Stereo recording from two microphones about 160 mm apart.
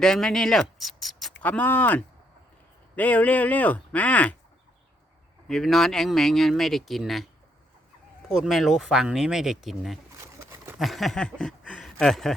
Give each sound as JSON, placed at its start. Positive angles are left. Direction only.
{"t": 0.0, "sound": "speech", "side_deg": 5}
{"t": 5.5, "sound": "speech", "side_deg": 0}
{"t": 8.3, "sound": "speech", "side_deg": 0}
{"t": 10.2, "sound": "a sound", "side_deg": -20}
{"t": 10.8, "sound": "speech", "side_deg": 0}